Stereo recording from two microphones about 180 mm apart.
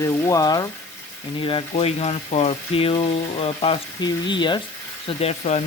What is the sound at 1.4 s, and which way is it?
Speech, 30° left (ahead or behind).